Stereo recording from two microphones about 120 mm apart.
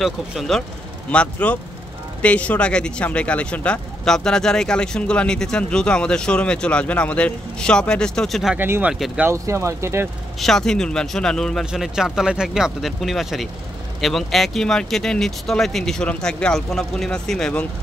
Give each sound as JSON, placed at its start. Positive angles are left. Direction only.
{"t": 0.0, "sound": "speech", "side_deg": 0}
{"t": 8.5, "sound": "speech", "side_deg": -15}
{"t": 8.9, "sound": "speech", "side_deg": 0}
{"t": 9.2, "sound": "speech", "side_deg": -25}
{"t": 10.4, "sound": "speech", "side_deg": 5}